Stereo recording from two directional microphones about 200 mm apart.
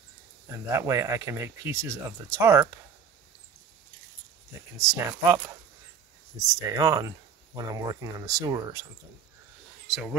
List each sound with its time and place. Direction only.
0.7 s speech: 15° right (ahead or behind)
4.7 s speech: 15° right (ahead or behind)